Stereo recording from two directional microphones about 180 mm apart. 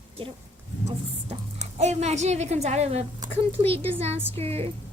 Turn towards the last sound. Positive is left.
turn(degrees=-35)  # may be behind; listen again after turning